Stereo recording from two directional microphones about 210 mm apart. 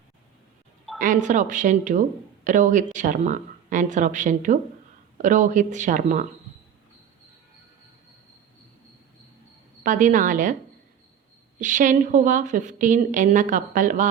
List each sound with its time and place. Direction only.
0.9 s speech: 40° right (ahead or behind)
9.8 s speech: 40° right (ahead or behind)
11.6 s speech: 35° right (ahead or behind)